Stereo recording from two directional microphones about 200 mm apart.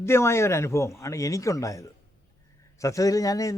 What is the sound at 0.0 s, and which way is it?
A man's voice, 15° left (ahead or behind).